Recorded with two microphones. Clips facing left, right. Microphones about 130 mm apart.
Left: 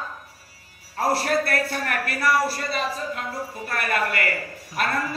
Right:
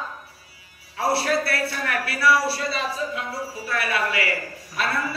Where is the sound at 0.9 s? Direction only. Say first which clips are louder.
Even; 45° left (ahead or behind).